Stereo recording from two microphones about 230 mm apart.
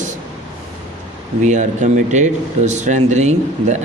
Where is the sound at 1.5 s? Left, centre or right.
Right.